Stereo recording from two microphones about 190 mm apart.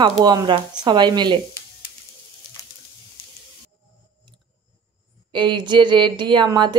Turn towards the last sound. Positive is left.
turn(degrees=-25)  # may be behind; listen again after turning